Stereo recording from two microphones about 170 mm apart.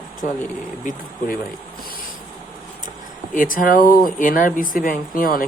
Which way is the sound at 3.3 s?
50° left (ahead or behind).